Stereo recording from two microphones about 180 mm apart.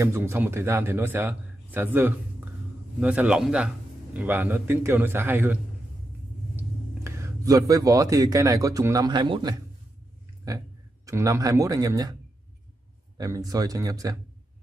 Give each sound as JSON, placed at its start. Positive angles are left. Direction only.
{"t": 0.0, "sound": "a man's voice", "side_deg": -15}
{"t": 13.2, "sound": "speech", "side_deg": -20}